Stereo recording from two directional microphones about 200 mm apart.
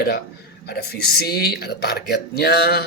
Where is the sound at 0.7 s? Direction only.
50° left (ahead or behind).